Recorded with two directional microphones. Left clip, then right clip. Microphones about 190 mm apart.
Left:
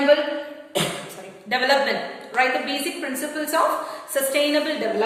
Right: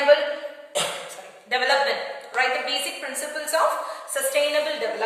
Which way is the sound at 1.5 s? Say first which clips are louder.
Left 1 dB; 15° left (ahead or behind).